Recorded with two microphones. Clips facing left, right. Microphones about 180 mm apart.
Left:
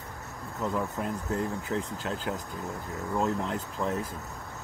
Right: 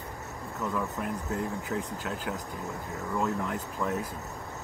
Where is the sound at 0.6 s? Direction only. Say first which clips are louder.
Left 1 dB; 25° left (ahead or behind).